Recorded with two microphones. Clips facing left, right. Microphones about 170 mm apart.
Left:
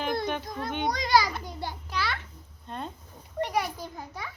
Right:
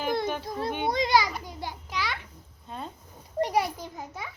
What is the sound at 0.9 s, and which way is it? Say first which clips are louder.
Speech: even; 25° right (ahead or behind).